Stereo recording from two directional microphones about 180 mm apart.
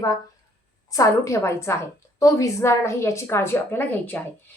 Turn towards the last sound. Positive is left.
turn(degrees=10)  # may be behind; listen again after turning